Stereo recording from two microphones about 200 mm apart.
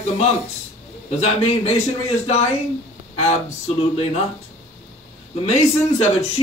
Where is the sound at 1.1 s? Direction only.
30° left (ahead or behind).